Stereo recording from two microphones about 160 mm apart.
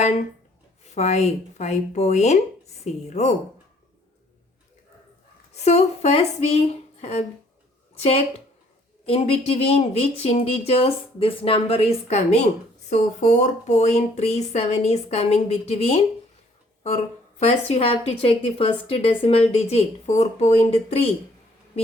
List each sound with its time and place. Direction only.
0.9 s speech: 45° left (ahead or behind)
5.6 s speech: 40° left (ahead or behind)
9.0 s speech: 35° left (ahead or behind)
17.4 s speech: 40° left (ahead or behind)